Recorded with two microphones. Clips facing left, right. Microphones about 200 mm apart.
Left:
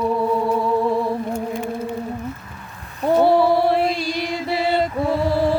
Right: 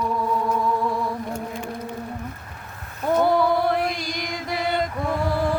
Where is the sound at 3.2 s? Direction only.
30° left (ahead or behind).